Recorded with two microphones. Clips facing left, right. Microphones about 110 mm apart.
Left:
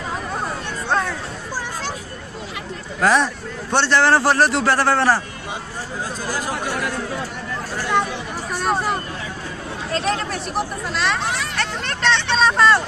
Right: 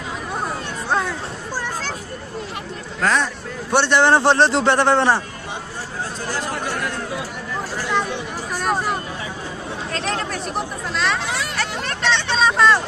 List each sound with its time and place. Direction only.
0.4 s hubbub: 10° right (ahead or behind)
3.0 s speech: 5° left (ahead or behind)
3.7 s a man's voice: 15° right (ahead or behind)
6.2 s chatter: 10° left (ahead or behind)
8.5 s a sound: centre (ahead or behind)